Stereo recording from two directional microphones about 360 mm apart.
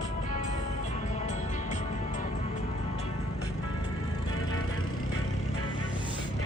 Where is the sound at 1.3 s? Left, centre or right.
Centre.